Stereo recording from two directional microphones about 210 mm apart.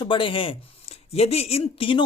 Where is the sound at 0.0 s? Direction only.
25° left (ahead or behind).